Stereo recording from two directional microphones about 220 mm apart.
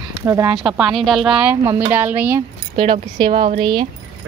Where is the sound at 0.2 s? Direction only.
15° right (ahead or behind).